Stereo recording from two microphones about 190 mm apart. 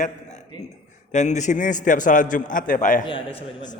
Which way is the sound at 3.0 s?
30° left (ahead or behind).